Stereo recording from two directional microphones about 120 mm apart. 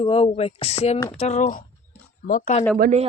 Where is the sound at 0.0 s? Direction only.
50° left (ahead or behind).